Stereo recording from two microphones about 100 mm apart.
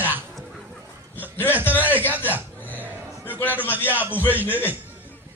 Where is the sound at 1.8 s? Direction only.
20° right (ahead or behind).